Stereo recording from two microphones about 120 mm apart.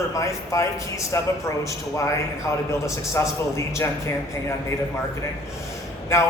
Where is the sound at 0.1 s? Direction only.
25° left (ahead or behind).